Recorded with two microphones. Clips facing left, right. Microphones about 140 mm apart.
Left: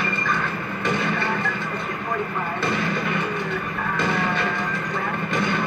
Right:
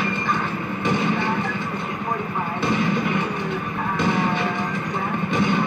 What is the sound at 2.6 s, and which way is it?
Music, 15° right (ahead or behind).